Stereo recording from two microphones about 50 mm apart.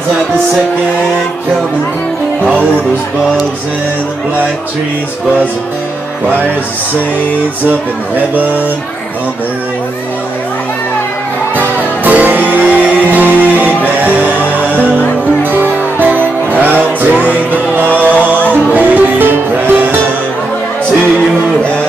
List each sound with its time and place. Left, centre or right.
2.4 s speech: right
8.4 s speech: right
11.5 s music: right
14.4 s music: left
15.4 s music: right